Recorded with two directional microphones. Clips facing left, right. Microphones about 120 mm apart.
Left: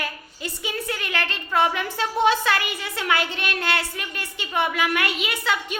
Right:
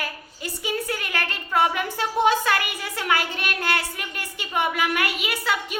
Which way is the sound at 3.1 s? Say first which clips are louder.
Even; 45° right (ahead or behind).